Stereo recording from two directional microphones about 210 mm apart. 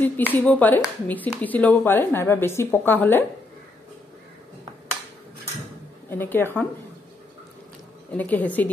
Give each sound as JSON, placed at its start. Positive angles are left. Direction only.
{"t": 0.0, "sound": "a woman's voice", "side_deg": 10}
{"t": 6.0, "sound": "a woman's voice", "side_deg": 10}
{"t": 8.2, "sound": "a woman's voice", "side_deg": 10}